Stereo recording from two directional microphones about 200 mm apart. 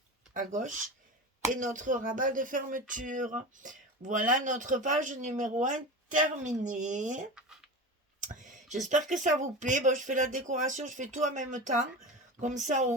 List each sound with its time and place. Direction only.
0.3 s speech: 40° right (ahead or behind)
8.2 s a sound: 40° right (ahead or behind)
8.9 s speech: 40° right (ahead or behind)